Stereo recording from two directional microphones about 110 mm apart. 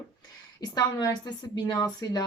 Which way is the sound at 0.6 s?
40° left (ahead or behind).